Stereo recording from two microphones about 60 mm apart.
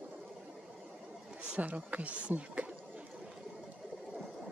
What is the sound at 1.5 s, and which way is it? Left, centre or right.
Speech, right.